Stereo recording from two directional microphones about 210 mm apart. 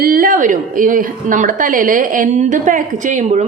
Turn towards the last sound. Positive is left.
turn(degrees=-35)  # may be behind; listen again after turning